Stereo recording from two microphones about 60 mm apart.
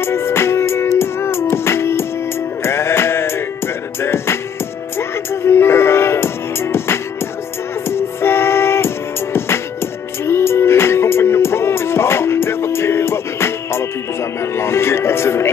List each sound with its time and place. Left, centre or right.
0.0 s music: left